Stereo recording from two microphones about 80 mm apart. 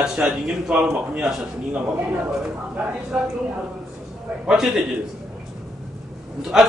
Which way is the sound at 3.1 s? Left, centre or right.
Centre.